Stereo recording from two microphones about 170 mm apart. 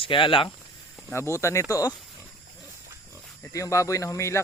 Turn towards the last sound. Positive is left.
turn(degrees=15)  # may be behind; listen again after turning